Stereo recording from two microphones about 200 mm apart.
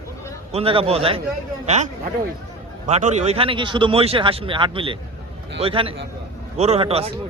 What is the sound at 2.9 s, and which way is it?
A man's voice, 35° right (ahead or behind).